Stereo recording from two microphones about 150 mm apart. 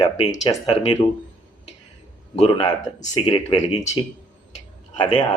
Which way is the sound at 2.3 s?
45° left (ahead or behind).